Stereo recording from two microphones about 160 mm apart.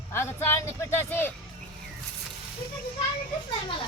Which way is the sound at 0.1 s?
15° left (ahead or behind).